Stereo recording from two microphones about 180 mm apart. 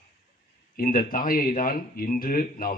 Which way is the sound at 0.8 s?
50° left (ahead or behind).